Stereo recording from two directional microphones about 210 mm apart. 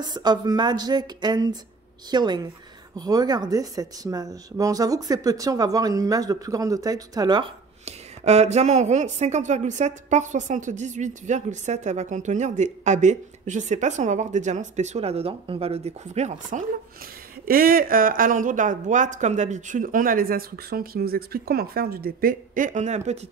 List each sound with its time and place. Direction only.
0.0 s speech: 20° right (ahead or behind)
7.8 s a woman's voice: 30° right (ahead or behind)